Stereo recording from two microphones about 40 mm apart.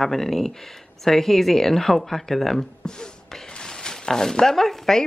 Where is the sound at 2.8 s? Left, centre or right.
Centre.